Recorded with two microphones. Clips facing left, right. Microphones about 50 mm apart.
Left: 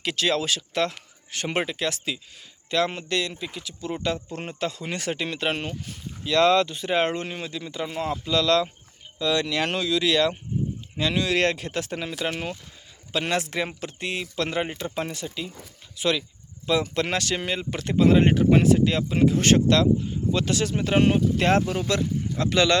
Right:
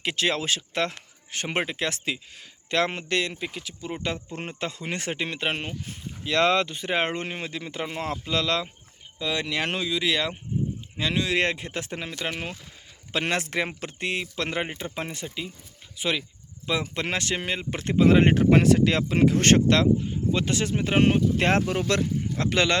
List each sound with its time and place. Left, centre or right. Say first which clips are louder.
0.0 s speech: left 1 dB; right
3.8 s speech: left 4 dB; centre
13.1 s speech: even; right
18.1 s speech: even; right
18.3 s speech: even; right
21.3 s speech: left 1 dB; right
22.4 s speech: left 3 dB; right